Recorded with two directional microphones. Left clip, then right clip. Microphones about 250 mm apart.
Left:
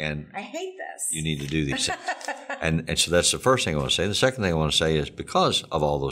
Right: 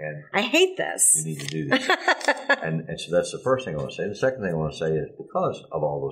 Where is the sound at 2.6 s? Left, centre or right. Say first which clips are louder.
Left 6 dB; left.